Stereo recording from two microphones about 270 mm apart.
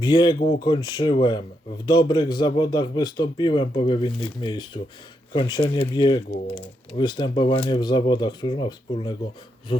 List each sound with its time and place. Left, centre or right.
0.0 s speech: centre